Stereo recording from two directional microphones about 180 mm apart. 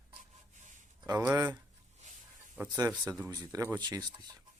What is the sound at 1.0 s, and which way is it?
Speech, 20° right (ahead or behind).